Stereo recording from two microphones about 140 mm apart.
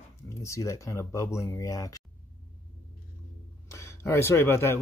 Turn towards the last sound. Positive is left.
turn(degrees=20)  # may be behind; listen again after turning